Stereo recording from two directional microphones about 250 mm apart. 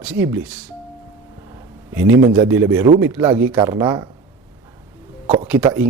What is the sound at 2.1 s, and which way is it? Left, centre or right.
Speech, right.